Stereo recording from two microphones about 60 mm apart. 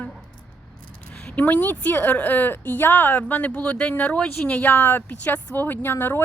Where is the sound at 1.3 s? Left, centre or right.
Left.